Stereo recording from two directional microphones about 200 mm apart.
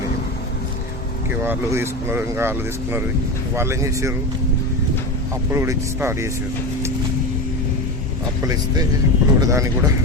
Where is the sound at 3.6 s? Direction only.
15° right (ahead or behind).